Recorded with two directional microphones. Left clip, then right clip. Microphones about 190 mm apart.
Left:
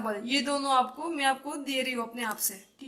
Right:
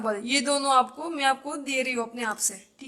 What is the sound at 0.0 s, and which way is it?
Speech, 30° right (ahead or behind).